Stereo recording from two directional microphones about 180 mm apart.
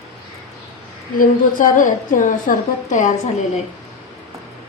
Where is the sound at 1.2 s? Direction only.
45° left (ahead or behind).